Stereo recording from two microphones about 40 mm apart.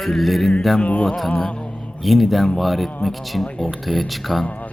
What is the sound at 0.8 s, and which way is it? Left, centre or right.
Music, left.